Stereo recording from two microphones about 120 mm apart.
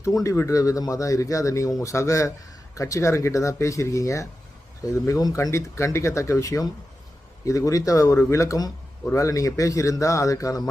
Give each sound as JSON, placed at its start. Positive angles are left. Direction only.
{"t": 0.0, "sound": "speech", "side_deg": 25}